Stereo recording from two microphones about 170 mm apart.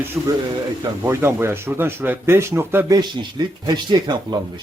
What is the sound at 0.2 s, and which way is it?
Speech, 15° right (ahead or behind).